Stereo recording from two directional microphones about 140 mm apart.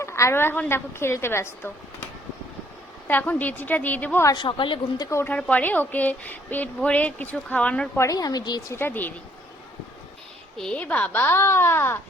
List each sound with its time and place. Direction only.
0.0 s a woman's voice: 20° left (ahead or behind)
3.1 s a woman's voice: 10° left (ahead or behind)
4.4 s a woman's voice: 35° left (ahead or behind)
5.0 s a woman's voice: 15° left (ahead or behind)
8.0 s speech: 25° left (ahead or behind)
8.7 s a woman's voice: 15° left (ahead or behind)
10.6 s a woman's voice: 10° left (ahead or behind)